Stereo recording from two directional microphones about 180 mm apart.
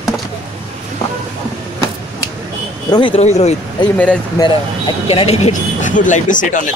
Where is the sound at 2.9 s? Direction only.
25° left (ahead or behind).